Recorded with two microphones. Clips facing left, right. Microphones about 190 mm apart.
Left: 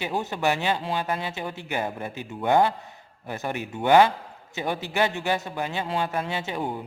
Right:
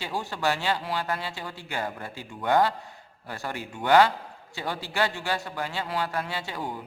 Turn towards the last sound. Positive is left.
turn(degrees=20)  # may be behind; listen again after turning